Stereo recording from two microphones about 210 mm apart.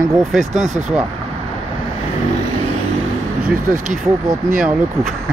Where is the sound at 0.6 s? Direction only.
35° right (ahead or behind).